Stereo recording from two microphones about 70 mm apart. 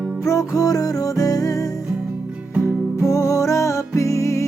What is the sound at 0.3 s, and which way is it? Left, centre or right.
Music, left.